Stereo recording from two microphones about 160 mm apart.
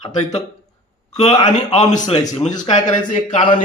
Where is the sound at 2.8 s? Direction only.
50° left (ahead or behind).